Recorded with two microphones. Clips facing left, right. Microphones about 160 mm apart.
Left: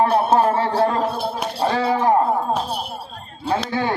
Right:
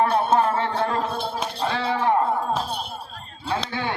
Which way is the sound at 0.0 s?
30° left (ahead or behind).